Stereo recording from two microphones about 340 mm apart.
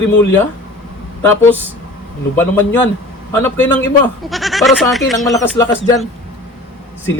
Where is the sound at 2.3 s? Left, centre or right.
Centre.